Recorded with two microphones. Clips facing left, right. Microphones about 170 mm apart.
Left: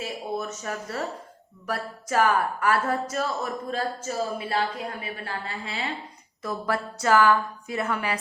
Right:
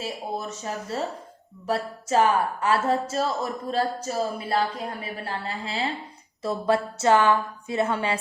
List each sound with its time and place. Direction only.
0.0 s a woman's voice: 30° right (ahead or behind)